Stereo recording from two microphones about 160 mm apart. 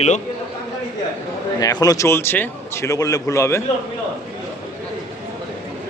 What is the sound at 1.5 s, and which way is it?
A man's voice, 25° left (ahead or behind).